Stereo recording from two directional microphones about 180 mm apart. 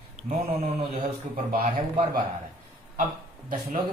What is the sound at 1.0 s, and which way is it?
Speech, 50° right (ahead or behind).